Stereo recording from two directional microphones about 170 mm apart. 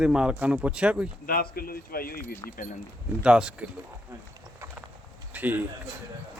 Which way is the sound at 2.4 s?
20° left (ahead or behind).